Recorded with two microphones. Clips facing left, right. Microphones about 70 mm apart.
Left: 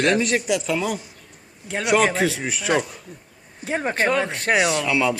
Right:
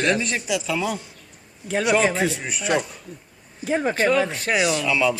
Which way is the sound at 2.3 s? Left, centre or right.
Left.